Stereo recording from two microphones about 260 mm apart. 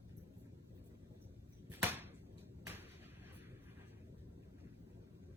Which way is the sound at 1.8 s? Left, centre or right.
Centre.